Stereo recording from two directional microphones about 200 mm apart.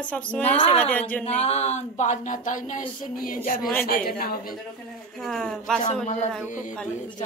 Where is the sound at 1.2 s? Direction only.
35° left (ahead or behind).